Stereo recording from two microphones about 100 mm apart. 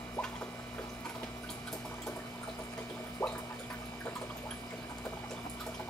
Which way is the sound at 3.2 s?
20° left (ahead or behind).